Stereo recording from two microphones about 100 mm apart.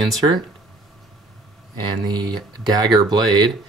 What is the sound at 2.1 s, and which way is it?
Speech, 45° right (ahead or behind).